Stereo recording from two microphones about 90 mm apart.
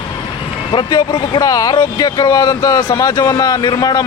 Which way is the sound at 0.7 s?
50° left (ahead or behind).